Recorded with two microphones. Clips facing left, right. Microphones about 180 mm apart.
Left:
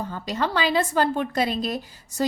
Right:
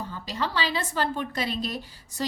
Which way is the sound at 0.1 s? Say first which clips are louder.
Left 5 dB; 50° left (ahead or behind).